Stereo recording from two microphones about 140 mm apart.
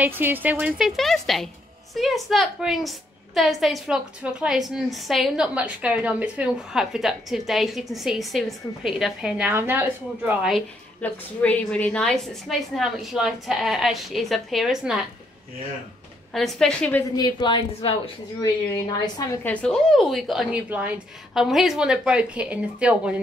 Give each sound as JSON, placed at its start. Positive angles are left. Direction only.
{"t": 0.0, "sound": "a woman's voice", "side_deg": -15}
{"t": 9.5, "sound": "a woman's voice", "side_deg": -15}
{"t": 11.0, "sound": "a woman's voice", "side_deg": 10}
{"t": 16.3, "sound": "a woman's voice", "side_deg": 0}
{"t": 17.1, "sound": "a woman's voice", "side_deg": 30}
{"t": 18.4, "sound": "a woman's voice", "side_deg": 25}
{"t": 19.5, "sound": "a woman's voice", "side_deg": 5}